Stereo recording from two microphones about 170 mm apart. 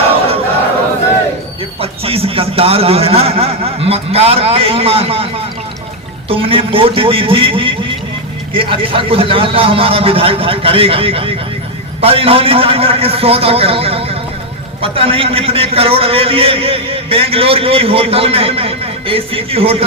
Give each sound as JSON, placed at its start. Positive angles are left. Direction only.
{"t": 1.8, "sound": "a man's voice", "side_deg": -35}